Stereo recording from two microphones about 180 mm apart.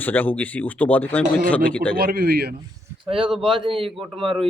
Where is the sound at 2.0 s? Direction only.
60° right (ahead or behind).